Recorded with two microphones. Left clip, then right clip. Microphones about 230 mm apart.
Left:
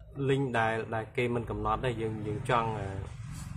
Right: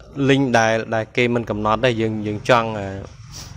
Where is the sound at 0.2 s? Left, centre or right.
Right.